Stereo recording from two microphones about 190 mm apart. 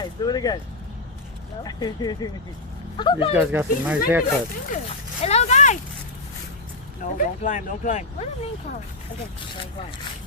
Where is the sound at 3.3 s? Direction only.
10° right (ahead or behind).